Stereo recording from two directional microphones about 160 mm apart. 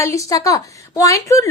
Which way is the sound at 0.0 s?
20° left (ahead or behind).